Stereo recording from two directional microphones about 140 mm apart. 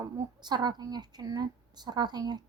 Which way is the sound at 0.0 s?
30° right (ahead or behind).